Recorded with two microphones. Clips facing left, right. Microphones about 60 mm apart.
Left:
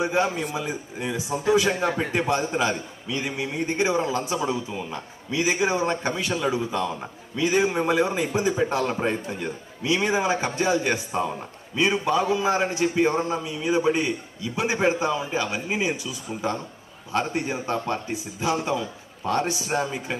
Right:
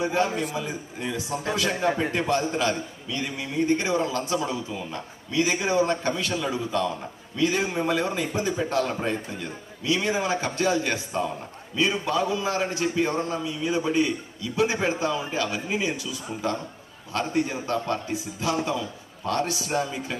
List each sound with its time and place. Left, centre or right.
0.0 s a man's voice: centre
17.1 s a man's voice: left